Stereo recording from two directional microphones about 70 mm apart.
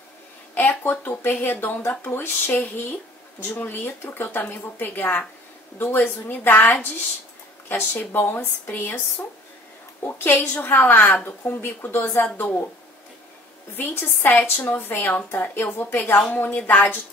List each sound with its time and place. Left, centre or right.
0.6 s a woman's voice: left
13.7 s a woman's voice: left